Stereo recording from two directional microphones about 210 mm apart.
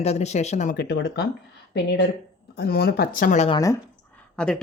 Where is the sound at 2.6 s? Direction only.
45° left (ahead or behind).